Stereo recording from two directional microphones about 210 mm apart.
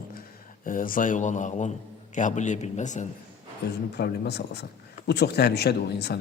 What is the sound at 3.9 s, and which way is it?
A man's voice, 50° left (ahead or behind).